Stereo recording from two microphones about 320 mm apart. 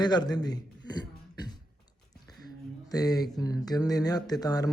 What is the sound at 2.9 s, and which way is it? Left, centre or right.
A man's voice, centre.